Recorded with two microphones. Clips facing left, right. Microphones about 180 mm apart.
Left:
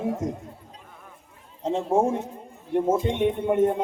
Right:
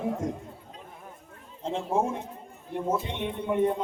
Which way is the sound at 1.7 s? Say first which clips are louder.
Left 5 dB; 45° left (ahead or behind).